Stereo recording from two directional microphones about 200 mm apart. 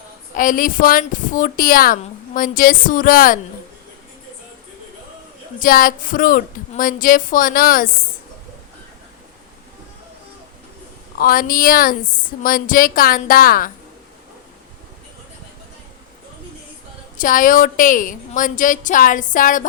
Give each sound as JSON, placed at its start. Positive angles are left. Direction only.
{"t": 0.3, "sound": "a woman's voice", "side_deg": 45}
{"t": 5.5, "sound": "a woman's voice", "side_deg": 45}
{"t": 11.2, "sound": "a woman's voice", "side_deg": 45}
{"t": 17.2, "sound": "a woman's voice", "side_deg": 45}